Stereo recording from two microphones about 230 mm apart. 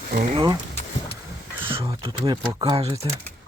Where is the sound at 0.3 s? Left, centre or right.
Centre.